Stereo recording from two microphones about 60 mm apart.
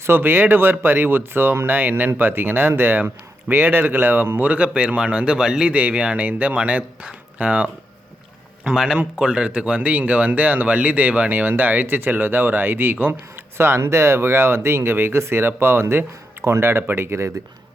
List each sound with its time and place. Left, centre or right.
0.0 s speech: right; by 5.6 s centre
5.6 s speech: right
8.6 s speech: centre; by 13.4 s right
13.6 s speech: right